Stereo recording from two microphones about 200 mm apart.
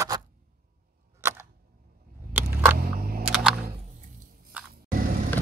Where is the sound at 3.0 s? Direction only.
50° right (ahead or behind).